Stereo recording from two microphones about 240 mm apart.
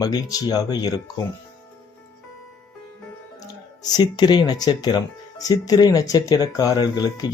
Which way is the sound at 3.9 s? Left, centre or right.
Centre.